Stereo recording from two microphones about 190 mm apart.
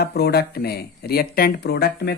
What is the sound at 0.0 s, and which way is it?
Speech, 60° left (ahead or behind).